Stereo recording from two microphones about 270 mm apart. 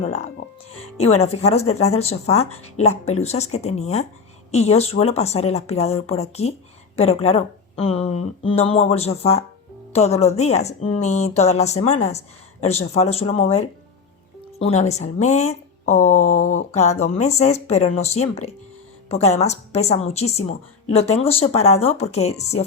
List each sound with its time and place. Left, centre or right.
0.0 s a woman's voice: left
14.6 s speech: left